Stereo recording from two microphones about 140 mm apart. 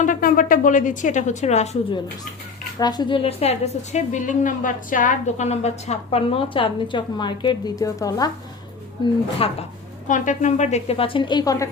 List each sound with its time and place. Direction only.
0.0 s speech: 75° left (ahead or behind); by 1.7 s 50° left (ahead or behind)
2.7 s a woman's voice: 30° left (ahead or behind)
9.4 s a woman's voice: 40° left (ahead or behind)
10.1 s a woman's voice: 65° left (ahead or behind); by 11.7 s 25° left (ahead or behind)